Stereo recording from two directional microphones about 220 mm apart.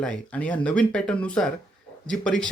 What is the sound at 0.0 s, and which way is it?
Speech, 5° left (ahead or behind).